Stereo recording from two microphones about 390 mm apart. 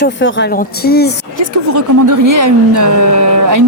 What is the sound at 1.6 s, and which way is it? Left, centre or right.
Speech, right.